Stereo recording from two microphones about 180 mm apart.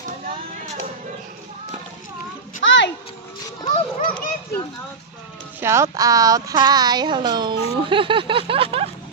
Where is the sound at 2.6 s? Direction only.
90° left.